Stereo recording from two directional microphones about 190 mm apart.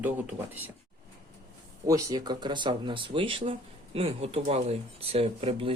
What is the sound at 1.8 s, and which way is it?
Speech, 20° right (ahead or behind).